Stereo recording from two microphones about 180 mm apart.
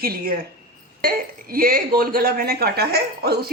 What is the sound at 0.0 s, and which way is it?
Speech, 55° right (ahead or behind).